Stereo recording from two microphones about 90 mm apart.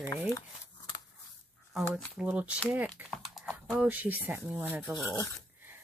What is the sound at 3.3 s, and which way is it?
Typing, centre (ahead or behind).